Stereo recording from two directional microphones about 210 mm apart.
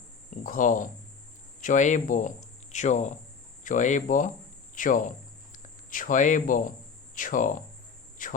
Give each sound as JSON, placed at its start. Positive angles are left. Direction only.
{"t": 0.4, "sound": "speech", "side_deg": 40}
{"t": 4.7, "sound": "cricket", "side_deg": 40}
{"t": 7.2, "sound": "speech", "side_deg": 40}
{"t": 8.2, "sound": "a sound", "side_deg": 40}